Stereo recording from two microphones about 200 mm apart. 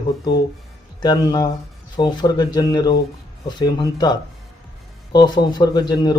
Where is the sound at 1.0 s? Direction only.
20° left (ahead or behind).